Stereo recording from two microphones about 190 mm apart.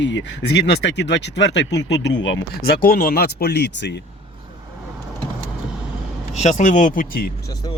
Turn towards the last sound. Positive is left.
turn(degrees=50)  # may be behind; listen again after turning